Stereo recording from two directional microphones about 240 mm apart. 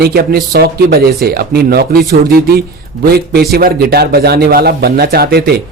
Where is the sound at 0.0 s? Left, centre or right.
Right.